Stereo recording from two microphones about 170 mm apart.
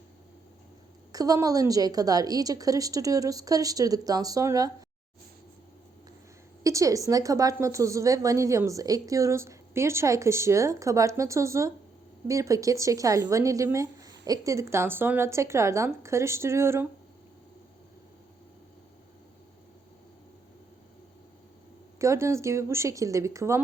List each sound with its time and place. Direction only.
1.1 s a woman's voice: 20° right (ahead or behind)
6.6 s a woman's voice: 20° right (ahead or behind)
21.9 s a woman's voice: 15° right (ahead or behind)